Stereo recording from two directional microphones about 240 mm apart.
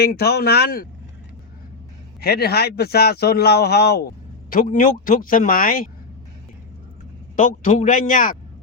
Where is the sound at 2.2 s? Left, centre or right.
Left.